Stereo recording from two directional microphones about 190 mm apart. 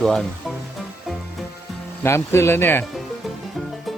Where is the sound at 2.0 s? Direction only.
15° left (ahead or behind).